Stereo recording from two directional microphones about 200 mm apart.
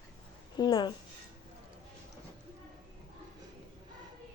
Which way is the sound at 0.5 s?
20° left (ahead or behind).